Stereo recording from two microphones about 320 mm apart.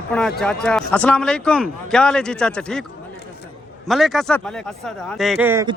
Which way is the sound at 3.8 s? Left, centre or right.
Centre.